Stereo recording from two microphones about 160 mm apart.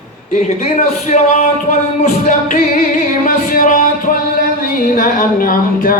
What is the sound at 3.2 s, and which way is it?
Music, 60° left (ahead or behind).